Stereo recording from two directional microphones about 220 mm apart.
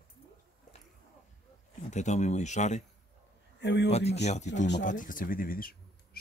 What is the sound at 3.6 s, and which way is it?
Speech, 50° left (ahead or behind).